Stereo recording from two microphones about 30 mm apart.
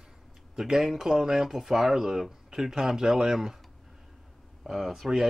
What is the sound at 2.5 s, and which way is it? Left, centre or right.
Speech, right.